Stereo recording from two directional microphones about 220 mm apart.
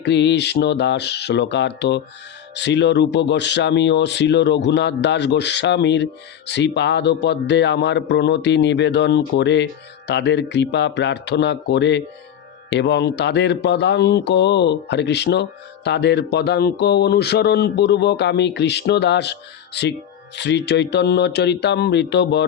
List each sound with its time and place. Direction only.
0.0 s speech: 50° left (ahead or behind)